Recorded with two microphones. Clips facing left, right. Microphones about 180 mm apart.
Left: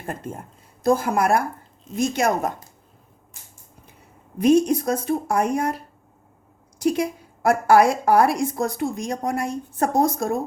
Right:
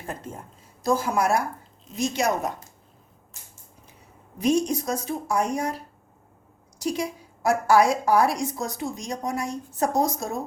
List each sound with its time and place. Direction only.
0.8 s a woman's voice: 55° left (ahead or behind)
4.4 s a woman's voice: 55° left (ahead or behind)
6.7 s a woman's voice: 55° left (ahead or behind)